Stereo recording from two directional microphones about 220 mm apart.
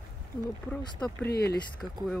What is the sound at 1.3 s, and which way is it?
Speech, 45° left (ahead or behind).